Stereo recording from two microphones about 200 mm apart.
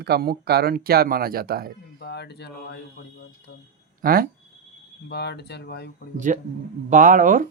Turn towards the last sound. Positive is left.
turn(degrees=-40)  # may be behind; listen again after turning